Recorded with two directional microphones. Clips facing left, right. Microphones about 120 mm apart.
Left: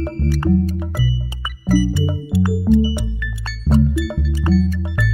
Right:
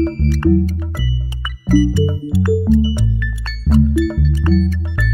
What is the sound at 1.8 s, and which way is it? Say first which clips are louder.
Music: right 4 dB; 15° left (ahead or behind).